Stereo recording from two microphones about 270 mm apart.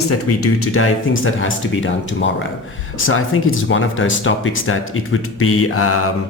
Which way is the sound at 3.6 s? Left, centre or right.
Left.